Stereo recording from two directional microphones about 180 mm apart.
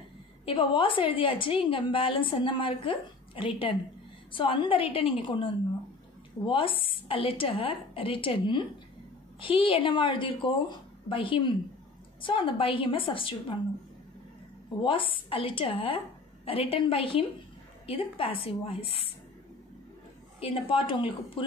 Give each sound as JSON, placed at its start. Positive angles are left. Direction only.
{"t": 0.5, "sound": "a woman's voice", "side_deg": 30}
{"t": 14.8, "sound": "a woman's voice", "side_deg": 30}
{"t": 20.3, "sound": "a woman's voice", "side_deg": 30}